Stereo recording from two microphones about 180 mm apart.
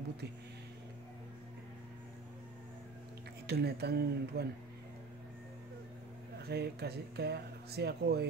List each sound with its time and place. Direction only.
3.4 s speech: 65° right (ahead or behind)
6.4 s speech: 65° right (ahead or behind)